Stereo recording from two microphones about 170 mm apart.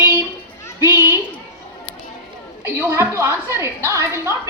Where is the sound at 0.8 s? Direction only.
15° right (ahead or behind).